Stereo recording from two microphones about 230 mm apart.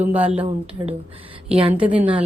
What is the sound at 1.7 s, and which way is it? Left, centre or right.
Speech, centre.